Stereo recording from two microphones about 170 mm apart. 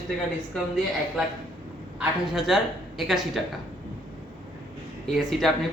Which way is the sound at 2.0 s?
5° right (ahead or behind).